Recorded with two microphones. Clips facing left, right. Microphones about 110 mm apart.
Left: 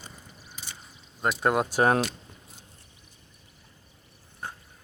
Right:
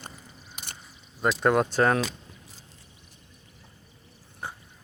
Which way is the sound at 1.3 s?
5° left (ahead or behind).